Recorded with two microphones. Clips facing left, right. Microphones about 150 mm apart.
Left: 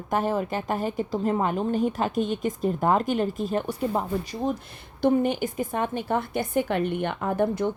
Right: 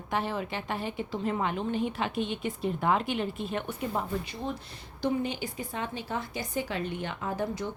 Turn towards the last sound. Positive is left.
turn(degrees=55)  # may be behind; listen again after turning